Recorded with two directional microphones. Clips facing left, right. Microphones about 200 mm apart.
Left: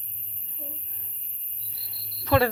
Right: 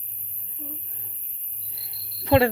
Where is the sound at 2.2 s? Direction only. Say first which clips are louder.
Right 3 dB; 25° right (ahead or behind).